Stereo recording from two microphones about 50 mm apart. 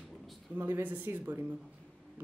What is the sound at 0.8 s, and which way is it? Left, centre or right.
Speech, right.